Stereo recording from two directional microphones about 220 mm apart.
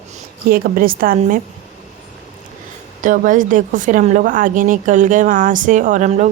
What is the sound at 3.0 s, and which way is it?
A woman's voice, 35° right (ahead or behind).